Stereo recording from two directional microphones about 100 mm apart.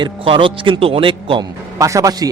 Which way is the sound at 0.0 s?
55° right (ahead or behind).